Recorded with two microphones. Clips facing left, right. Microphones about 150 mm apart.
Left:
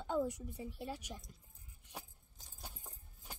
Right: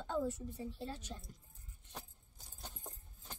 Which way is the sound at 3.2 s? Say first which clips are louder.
Even; 10° left (ahead or behind).